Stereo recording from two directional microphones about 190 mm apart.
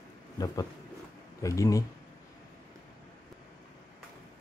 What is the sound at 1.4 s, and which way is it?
Speech, 15° left (ahead or behind).